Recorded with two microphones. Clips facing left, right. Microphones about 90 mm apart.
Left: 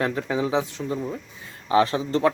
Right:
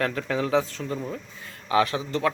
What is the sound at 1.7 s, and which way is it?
Speech, 30° left (ahead or behind).